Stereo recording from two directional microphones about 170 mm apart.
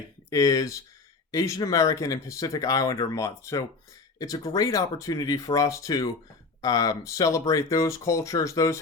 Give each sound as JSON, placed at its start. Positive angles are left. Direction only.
{"t": 0.3, "sound": "speech", "side_deg": 20}